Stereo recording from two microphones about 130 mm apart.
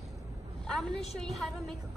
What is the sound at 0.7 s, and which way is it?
Speech, 5° left (ahead or behind).